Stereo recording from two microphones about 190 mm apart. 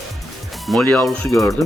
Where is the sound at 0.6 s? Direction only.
5° left (ahead or behind).